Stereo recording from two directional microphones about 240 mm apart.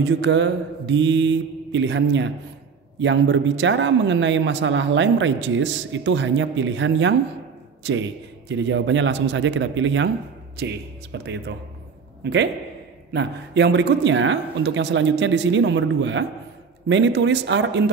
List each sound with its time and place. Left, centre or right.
0.0 s a man's voice: right